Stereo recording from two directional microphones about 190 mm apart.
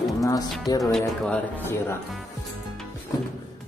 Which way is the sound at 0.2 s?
20° left (ahead or behind).